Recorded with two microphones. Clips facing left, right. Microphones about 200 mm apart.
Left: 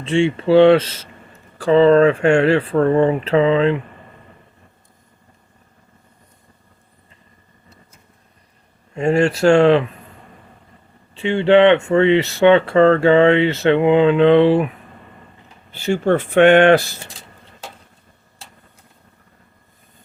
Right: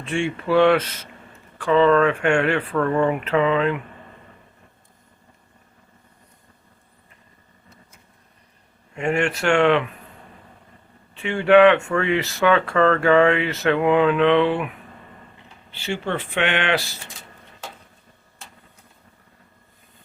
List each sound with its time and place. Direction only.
0.0 s speech: 25° left (ahead or behind)
9.0 s speech: 35° left (ahead or behind)
11.1 s speech: 25° left (ahead or behind)
15.7 s speech: 45° left (ahead or behind)